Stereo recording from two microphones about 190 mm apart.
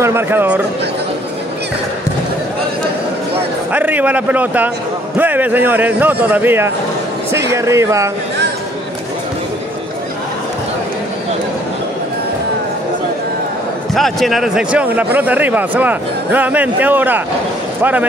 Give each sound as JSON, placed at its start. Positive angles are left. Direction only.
{"t": 0.0, "sound": "a man's voice", "side_deg": -10}
{"t": 3.7, "sound": "a man's voice", "side_deg": -10}
{"t": 13.9, "sound": "a man's voice", "side_deg": 0}